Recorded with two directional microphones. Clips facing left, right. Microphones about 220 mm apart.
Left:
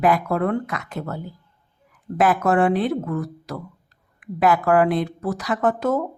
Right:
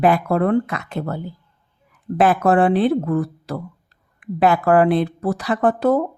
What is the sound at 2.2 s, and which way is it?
Speech, 30° right (ahead or behind).